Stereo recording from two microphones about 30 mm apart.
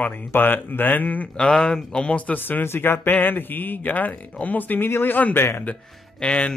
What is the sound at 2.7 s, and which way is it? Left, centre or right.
Speech, left.